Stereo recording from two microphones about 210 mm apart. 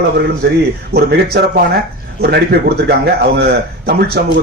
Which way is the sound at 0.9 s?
50° right (ahead or behind).